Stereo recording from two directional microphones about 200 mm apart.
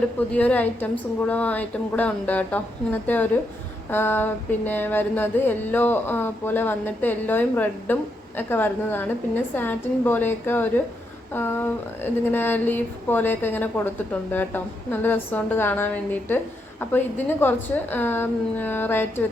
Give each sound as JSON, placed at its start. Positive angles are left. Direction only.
{"t": 0.3, "sound": "a woman's voice", "side_deg": 10}